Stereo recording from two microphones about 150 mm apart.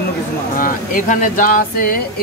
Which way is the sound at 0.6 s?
65° left (ahead or behind).